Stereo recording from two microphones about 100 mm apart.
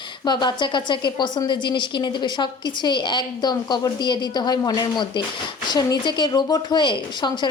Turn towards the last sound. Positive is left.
turn(degrees=50)  # may be behind; listen again after turning